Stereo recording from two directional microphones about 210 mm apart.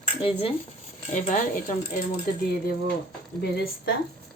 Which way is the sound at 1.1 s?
35° left (ahead or behind).